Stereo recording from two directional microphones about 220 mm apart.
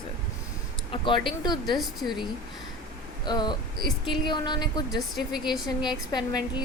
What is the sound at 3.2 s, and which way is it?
Speech, 20° left (ahead or behind).